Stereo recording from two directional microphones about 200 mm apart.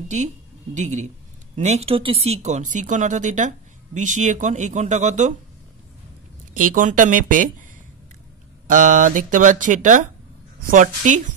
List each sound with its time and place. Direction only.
0.1 s a woman's voice: 35° right (ahead or behind)
6.5 s a woman's voice: 40° right (ahead or behind)
8.6 s a woman's voice: 40° right (ahead or behind)